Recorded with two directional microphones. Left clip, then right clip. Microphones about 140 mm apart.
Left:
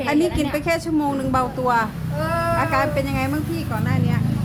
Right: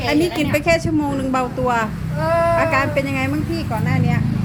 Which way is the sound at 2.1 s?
25° left (ahead or behind).